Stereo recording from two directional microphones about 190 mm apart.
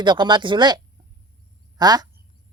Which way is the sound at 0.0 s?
25° right (ahead or behind).